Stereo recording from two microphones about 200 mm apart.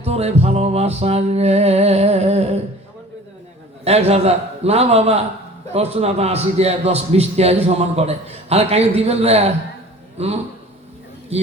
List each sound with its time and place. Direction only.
0.0 s a man's voice: 30° right (ahead or behind)
3.8 s a man's voice: 30° right (ahead or behind)